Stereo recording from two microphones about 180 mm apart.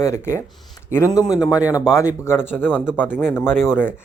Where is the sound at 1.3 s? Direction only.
5° right (ahead or behind).